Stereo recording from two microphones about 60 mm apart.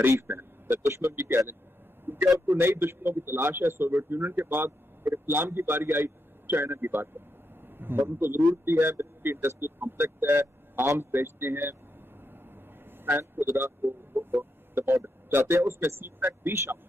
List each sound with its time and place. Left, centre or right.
0.1 s a sound: right
0.8 s a man's voice: right
13.0 s a man's voice: right